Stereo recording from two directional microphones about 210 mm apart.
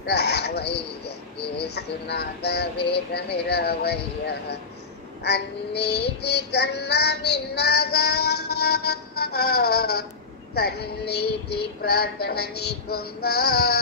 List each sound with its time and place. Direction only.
0.0 s speech: 50° left (ahead or behind)
1.6 s child singing: 50° left (ahead or behind)
5.8 s child singing: 55° left (ahead or behind)